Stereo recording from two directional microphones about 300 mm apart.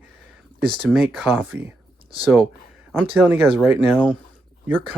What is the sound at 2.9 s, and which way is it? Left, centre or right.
Speech, centre.